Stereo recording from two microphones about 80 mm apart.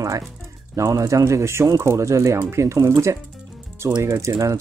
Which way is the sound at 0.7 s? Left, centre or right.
Right.